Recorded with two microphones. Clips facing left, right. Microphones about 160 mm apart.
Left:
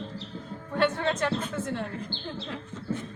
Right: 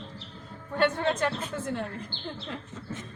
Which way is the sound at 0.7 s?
5° right (ahead or behind).